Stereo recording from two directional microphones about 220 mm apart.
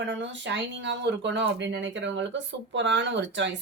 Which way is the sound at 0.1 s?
55° right (ahead or behind).